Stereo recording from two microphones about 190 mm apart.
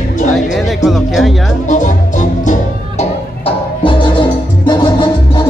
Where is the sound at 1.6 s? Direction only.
40° left (ahead or behind).